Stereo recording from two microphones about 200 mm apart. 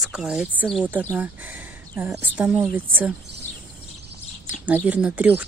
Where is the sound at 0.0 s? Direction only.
Centre (ahead or behind).